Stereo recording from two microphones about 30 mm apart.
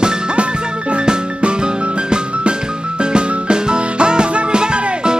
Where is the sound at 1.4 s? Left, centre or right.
Right.